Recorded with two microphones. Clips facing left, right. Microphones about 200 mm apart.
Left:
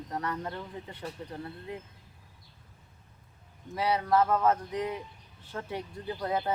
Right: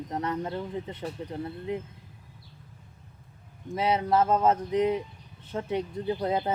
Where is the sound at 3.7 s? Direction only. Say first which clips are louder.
Right 2 dB; 20° right (ahead or behind).